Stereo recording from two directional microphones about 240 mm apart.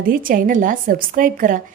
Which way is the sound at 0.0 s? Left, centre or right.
Right.